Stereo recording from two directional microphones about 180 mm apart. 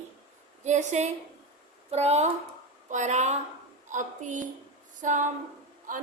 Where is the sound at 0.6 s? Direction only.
40° right (ahead or behind).